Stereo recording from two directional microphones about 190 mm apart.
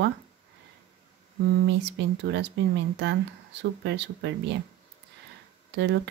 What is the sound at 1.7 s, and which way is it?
Speech, 70° right (ahead or behind).